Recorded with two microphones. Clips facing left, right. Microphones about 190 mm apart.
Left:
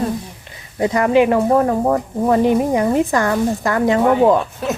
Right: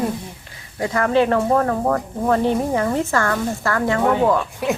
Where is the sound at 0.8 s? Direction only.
20° left (ahead or behind).